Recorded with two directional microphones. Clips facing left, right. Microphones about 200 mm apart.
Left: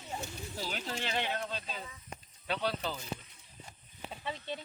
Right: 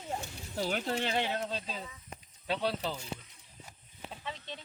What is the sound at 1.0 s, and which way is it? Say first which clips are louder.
Speech: right 3 dB; 30° right (ahead or behind).